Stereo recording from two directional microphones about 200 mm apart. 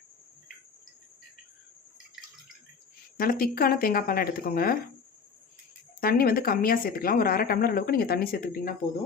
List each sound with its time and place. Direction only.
3.2 s a woman's voice: 45° left (ahead or behind)
6.0 s a woman's voice: 45° left (ahead or behind)